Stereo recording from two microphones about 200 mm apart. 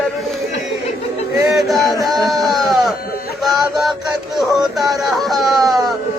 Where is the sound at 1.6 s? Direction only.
Centre (ahead or behind).